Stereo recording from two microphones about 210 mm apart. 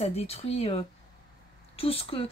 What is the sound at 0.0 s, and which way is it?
Speech, 30° left (ahead or behind).